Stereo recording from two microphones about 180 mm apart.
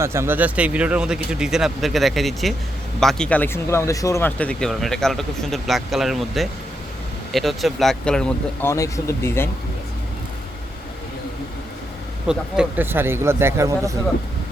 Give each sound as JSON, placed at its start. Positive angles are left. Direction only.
{"t": 0.0, "sound": "speech", "side_deg": -15}
{"t": 8.7, "sound": "speech", "side_deg": 15}
{"t": 12.3, "sound": "speech", "side_deg": -5}